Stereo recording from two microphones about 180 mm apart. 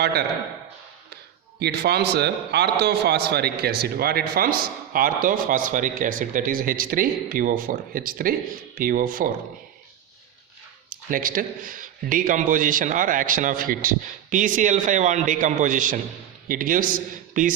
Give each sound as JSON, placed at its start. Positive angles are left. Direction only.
{"t": 0.0, "sound": "a man's voice", "side_deg": -60}
{"t": 1.5, "sound": "a man's voice", "side_deg": -65}
{"t": 10.8, "sound": "speech", "side_deg": -50}